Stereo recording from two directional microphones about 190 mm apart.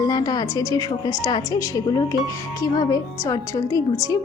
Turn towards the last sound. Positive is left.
turn(degrees=15)  # may be behind; listen again after turning